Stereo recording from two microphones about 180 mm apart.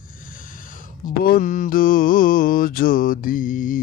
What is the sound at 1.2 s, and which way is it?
Mantra, 50° left (ahead or behind).